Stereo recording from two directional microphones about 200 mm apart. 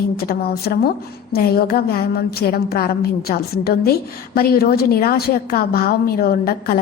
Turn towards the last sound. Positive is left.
turn(degrees=50)  # may be behind; listen again after turning